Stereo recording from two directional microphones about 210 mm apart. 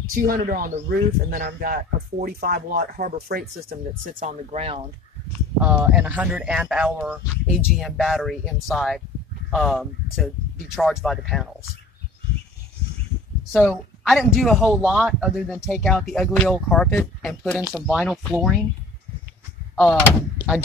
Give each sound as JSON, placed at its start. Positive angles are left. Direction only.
{"t": 0.1, "sound": "speech", "side_deg": -45}
{"t": 5.6, "sound": "speech", "side_deg": -5}
{"t": 13.5, "sound": "speech", "side_deg": 0}
{"t": 19.7, "sound": "speech", "side_deg": 5}